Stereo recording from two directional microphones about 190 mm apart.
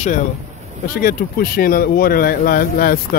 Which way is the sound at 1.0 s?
50° left (ahead or behind).